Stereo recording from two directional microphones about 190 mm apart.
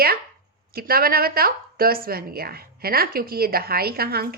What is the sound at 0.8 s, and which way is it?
Speech, 50° right (ahead or behind).